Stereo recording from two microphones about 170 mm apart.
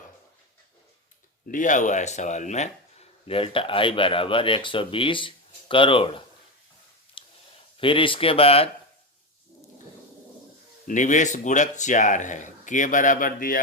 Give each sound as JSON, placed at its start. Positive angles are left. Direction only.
{"t": 1.5, "sound": "speech", "side_deg": 50}
{"t": 3.2, "sound": "speech", "side_deg": 35}
{"t": 7.2, "sound": "a sound", "side_deg": 30}
{"t": 7.8, "sound": "speech", "side_deg": 30}
{"t": 10.8, "sound": "speech", "side_deg": 45}